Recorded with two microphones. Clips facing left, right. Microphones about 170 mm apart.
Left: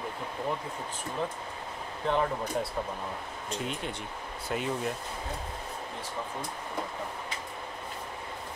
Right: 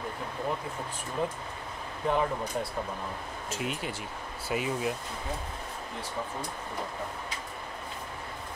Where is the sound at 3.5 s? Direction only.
5° right (ahead or behind).